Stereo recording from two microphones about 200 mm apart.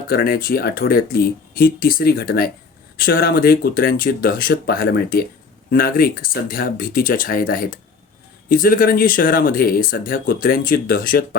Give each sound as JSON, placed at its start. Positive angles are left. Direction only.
{"t": 0.1, "sound": "speech", "side_deg": 50}